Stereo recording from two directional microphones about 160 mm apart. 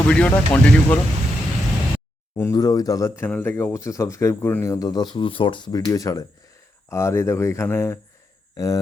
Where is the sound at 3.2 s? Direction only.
10° left (ahead or behind).